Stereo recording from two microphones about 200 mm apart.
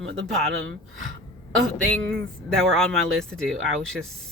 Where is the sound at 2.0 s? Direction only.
5° left (ahead or behind).